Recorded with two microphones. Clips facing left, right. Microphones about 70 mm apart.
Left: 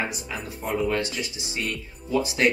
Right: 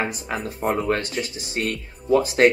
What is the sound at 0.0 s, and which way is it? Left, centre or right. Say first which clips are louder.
Speech: right 4 dB; right.